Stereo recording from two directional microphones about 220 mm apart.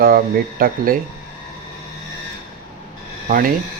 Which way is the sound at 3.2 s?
40° right (ahead or behind).